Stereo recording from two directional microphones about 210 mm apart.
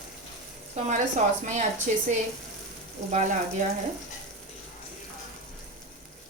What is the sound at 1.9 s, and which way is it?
Speech, 35° right (ahead or behind).